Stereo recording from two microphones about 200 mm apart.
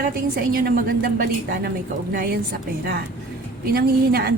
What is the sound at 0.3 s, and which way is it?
Speech, 50° right (ahead or behind).